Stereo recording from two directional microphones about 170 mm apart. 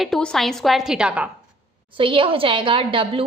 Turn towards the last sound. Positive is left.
turn(degrees=-30)  # may be behind; listen again after turning